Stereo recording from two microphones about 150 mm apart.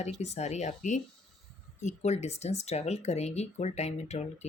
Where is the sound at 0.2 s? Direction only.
45° left (ahead or behind).